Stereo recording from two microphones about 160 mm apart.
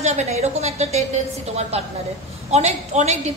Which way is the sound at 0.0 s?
45° right (ahead or behind).